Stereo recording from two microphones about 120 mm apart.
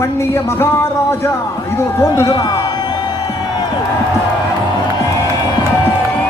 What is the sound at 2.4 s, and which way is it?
Music, 35° left (ahead or behind).